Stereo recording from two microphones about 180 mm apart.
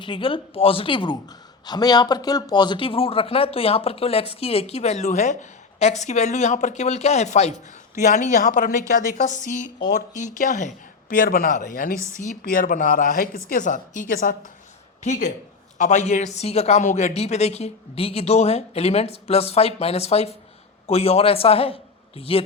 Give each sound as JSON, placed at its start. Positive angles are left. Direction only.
{"t": 0.0, "sound": "a woman's voice", "side_deg": 30}